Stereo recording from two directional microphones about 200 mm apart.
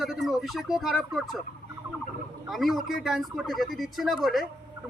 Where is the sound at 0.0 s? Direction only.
Centre (ahead or behind).